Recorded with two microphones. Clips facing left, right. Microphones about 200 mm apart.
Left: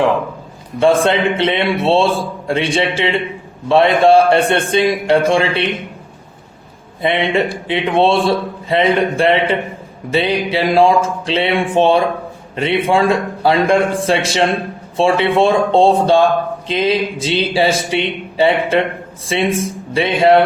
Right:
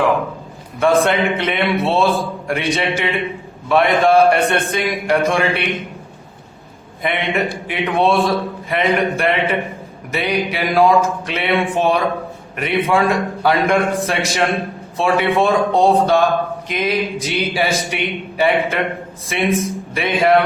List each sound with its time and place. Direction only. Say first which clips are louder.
0.8 s a man's voice: left 2 dB; 30° left (ahead or behind)
7.0 s a man's voice: left 4 dB; 30° left (ahead or behind)